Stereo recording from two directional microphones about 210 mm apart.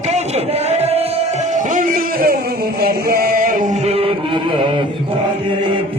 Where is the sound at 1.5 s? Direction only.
40° right (ahead or behind).